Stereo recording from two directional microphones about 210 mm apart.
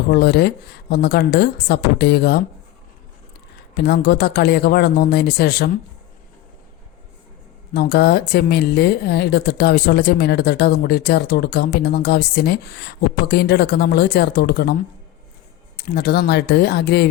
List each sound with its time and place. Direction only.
0.1 s a woman's voice: 50° left (ahead or behind)
3.8 s a woman's voice: 50° left (ahead or behind)
7.7 s a woman's voice: 50° left (ahead or behind)
16.0 s a woman's voice: 50° left (ahead or behind)